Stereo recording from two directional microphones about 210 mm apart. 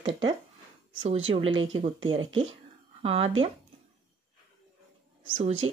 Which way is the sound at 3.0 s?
30° right (ahead or behind).